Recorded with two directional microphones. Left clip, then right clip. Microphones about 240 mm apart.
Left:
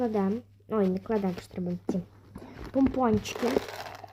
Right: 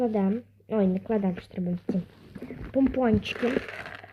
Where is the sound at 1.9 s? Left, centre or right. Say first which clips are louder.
Right 1 dB; centre.